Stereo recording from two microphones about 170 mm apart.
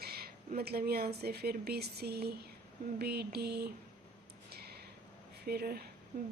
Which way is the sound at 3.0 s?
70° right (ahead or behind).